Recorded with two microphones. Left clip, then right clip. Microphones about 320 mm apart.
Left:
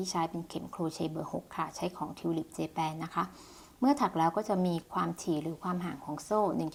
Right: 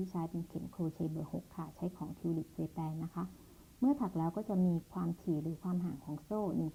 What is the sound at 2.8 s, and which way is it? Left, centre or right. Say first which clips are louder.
Speech: left 11 dB; centre.